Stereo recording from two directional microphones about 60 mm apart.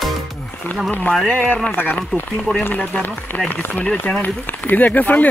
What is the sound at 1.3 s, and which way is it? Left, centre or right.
Speech, left.